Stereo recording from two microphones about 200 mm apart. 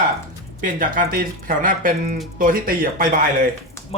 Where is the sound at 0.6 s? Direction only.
45° right (ahead or behind).